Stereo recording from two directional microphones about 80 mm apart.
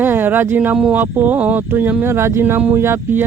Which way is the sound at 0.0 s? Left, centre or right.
Right.